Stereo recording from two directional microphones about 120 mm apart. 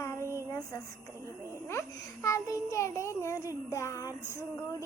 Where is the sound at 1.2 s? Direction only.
25° right (ahead or behind).